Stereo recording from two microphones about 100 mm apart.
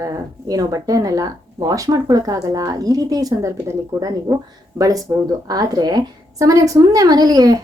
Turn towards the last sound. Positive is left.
turn(degrees=-40)  # may be behind; listen again after turning